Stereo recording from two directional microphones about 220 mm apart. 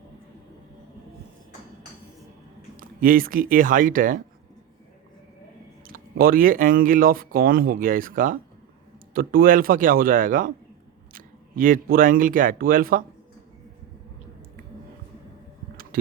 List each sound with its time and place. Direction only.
2.7 s speech: 40° right (ahead or behind)
5.8 s speech: 40° right (ahead or behind)